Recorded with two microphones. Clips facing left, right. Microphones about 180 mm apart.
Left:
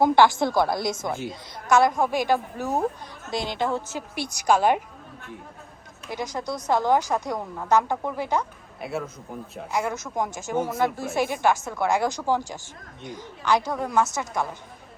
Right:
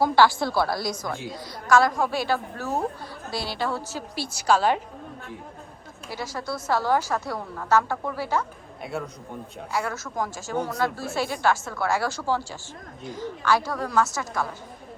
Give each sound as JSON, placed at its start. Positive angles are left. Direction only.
{"t": 0.0, "sound": "a woman's voice", "side_deg": 20}
{"t": 1.1, "sound": "a man's voice", "side_deg": 0}
{"t": 1.6, "sound": "a woman's voice", "side_deg": 20}
{"t": 6.1, "sound": "a woman's voice", "side_deg": 15}
{"t": 8.8, "sound": "a man's voice", "side_deg": 0}
{"t": 9.9, "sound": "a woman's voice", "side_deg": 20}